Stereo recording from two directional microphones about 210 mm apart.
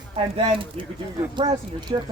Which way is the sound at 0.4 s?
25° right (ahead or behind).